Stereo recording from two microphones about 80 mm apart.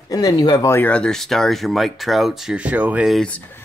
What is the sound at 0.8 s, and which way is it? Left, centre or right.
Speech, centre.